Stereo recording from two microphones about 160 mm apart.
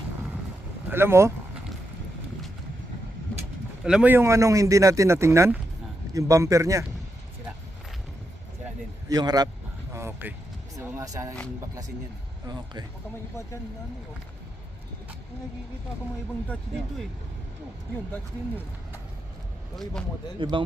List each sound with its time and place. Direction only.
0.9 s speech: 15° right (ahead or behind)
3.8 s a man's voice: 5° right (ahead or behind)
9.0 s a man's voice: 25° right (ahead or behind)
9.9 s vehicle: 15° right (ahead or behind)
10.8 s a man's voice: 15° right (ahead or behind)
12.5 s a man's voice: 25° right (ahead or behind)
19.7 s speech: 5° left (ahead or behind)
20.4 s a man's voice: 30° right (ahead or behind)